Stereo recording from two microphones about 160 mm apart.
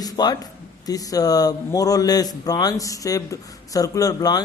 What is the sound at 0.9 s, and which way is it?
A man's voice, 25° left (ahead or behind).